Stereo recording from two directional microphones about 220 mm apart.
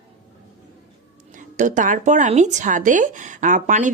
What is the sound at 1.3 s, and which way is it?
Speech, 35° right (ahead or behind).